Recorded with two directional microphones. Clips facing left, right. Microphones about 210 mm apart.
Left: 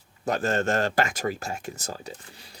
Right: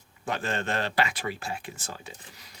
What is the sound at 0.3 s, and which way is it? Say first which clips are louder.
Speech: left 6 dB; 45° left (ahead or behind).